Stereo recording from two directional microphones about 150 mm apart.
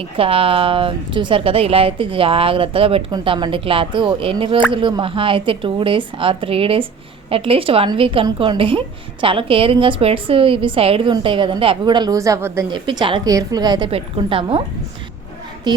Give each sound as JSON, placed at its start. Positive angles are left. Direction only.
{"t": 0.2, "sound": "a woman's voice", "side_deg": -40}
{"t": 12.7, "sound": "a woman's voice", "side_deg": -30}